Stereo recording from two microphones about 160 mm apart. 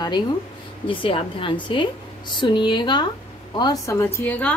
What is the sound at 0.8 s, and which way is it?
A woman's voice, 35° left (ahead or behind).